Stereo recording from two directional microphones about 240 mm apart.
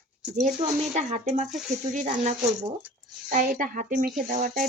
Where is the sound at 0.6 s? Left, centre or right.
Right.